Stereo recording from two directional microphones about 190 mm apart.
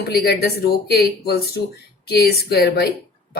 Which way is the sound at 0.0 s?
55° left (ahead or behind).